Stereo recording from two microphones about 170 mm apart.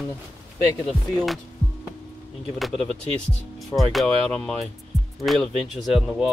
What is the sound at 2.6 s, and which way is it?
Speech, centre (ahead or behind).